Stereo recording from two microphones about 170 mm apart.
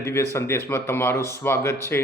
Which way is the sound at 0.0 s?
15° left (ahead or behind).